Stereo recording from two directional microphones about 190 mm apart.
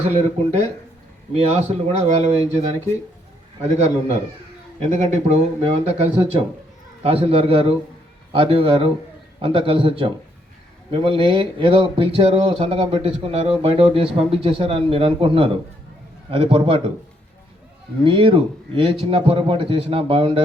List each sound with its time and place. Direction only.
0.0 s speech: 35° right (ahead or behind)
3.6 s speech: 35° right (ahead or behind)
18.0 s speech: 25° right (ahead or behind)